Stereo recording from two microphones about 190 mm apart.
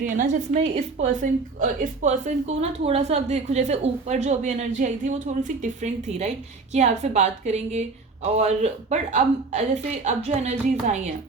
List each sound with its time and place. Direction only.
0.0 s a woman's voice: 45° right (ahead or behind)